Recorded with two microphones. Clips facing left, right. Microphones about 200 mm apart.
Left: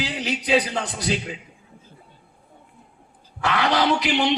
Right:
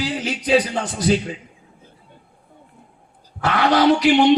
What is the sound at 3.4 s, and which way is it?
Music, 40° right (ahead or behind).